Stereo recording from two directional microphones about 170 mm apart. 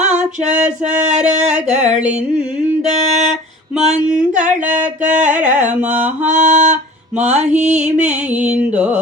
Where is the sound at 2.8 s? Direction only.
40° right (ahead or behind).